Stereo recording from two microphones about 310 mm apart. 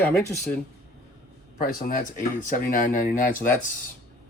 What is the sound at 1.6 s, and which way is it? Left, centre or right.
Speech, left.